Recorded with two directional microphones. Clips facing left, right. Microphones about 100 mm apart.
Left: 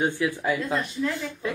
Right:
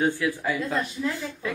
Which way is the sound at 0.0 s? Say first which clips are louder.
Even; 20° left (ahead or behind).